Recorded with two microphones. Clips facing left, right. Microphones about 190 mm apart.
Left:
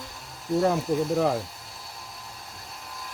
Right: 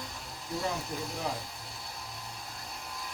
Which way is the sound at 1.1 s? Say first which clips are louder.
Left 12 dB; 60° left (ahead or behind).